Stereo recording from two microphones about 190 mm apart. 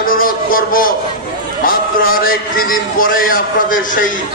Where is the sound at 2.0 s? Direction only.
50° left (ahead or behind).